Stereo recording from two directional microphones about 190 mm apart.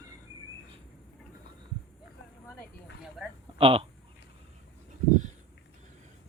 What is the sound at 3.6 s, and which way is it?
Speech, 30° right (ahead or behind).